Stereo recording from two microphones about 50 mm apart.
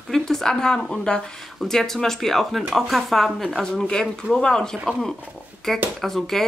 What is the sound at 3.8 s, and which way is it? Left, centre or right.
Speech, centre.